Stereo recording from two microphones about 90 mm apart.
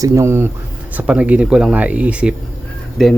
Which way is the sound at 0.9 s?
15° right (ahead or behind).